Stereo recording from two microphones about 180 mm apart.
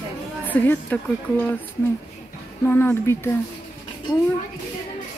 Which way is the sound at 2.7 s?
10° left (ahead or behind).